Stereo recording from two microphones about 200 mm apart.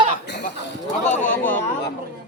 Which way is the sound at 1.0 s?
40° left (ahead or behind).